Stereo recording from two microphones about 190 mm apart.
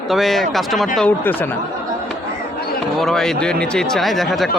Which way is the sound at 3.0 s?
Centre (ahead or behind).